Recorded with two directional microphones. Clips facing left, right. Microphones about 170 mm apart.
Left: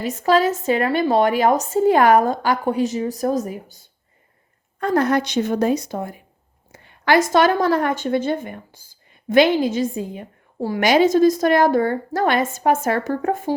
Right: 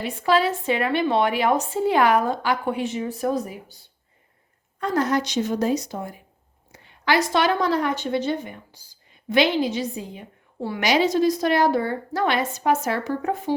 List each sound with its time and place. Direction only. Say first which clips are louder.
0.0 s a woman's voice: left 3 dB; 45° left (ahead or behind)